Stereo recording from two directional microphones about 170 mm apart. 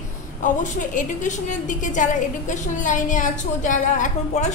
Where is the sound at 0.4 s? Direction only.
50° left (ahead or behind).